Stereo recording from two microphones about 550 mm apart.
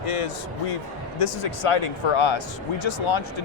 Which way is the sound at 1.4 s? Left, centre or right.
Left.